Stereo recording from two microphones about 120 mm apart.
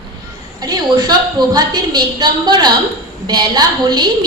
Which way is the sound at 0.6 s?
35° right (ahead or behind).